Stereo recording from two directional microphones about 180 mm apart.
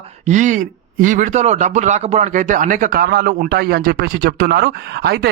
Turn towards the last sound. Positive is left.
turn(degrees=-65)  # may be behind; listen again after turning